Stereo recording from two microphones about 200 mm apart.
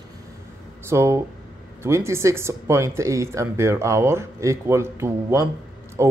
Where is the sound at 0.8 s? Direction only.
15° right (ahead or behind).